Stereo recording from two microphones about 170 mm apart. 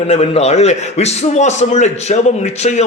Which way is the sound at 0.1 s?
40° left (ahead or behind).